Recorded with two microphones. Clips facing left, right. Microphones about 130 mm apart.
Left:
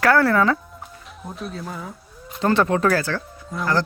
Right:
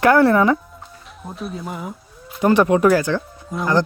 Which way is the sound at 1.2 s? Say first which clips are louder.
Right 2 dB; 5° right (ahead or behind).